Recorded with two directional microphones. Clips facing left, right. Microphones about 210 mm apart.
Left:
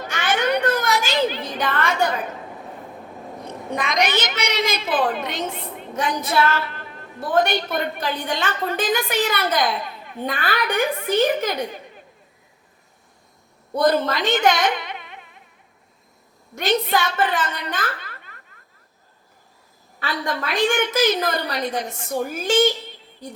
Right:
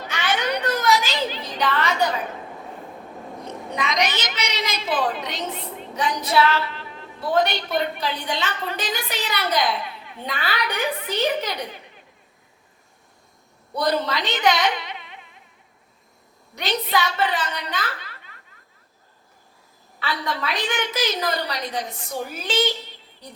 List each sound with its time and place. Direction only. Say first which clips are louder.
0.1 s children playing: left 3 dB; 50° left (ahead or behind)
3.8 s a woman's voice: left 3 dB; 55° left (ahead or behind)
13.7 s speech: left 4 dB; 50° left (ahead or behind)
16.6 s a woman's voice: left 3 dB; 50° left (ahead or behind)
20.0 s a woman's voice: left 1 dB; 50° left (ahead or behind)